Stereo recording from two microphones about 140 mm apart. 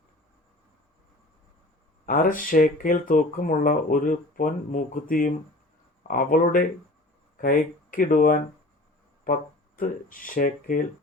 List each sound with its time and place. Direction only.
2.0 s speech: 75° left (ahead or behind)